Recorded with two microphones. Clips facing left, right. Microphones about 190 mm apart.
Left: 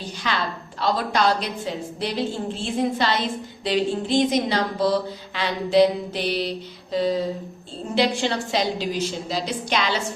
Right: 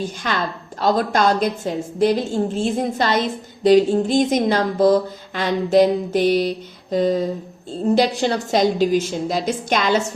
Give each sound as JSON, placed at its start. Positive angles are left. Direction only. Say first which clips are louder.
{"t": 0.0, "sound": "a woman's voice", "louder": "right 4 dB", "side_deg": -50}